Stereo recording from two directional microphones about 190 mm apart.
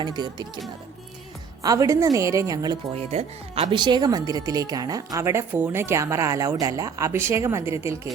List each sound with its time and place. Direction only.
0.0 s music: 20° right (ahead or behind)
1.6 s speech: 15° right (ahead or behind)
2.9 s speech: 30° right (ahead or behind); by 7.9 s 15° right (ahead or behind)